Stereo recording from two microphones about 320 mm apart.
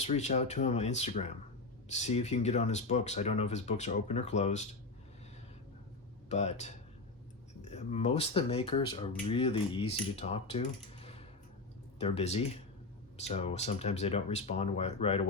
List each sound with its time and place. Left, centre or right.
0.0 s speech: left
6.2 s speech: left